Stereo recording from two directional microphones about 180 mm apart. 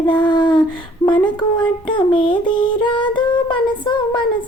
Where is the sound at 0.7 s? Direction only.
25° left (ahead or behind).